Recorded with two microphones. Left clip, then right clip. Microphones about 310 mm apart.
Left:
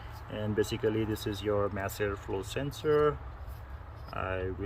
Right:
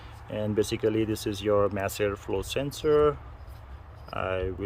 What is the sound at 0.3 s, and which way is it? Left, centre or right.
Speech, right.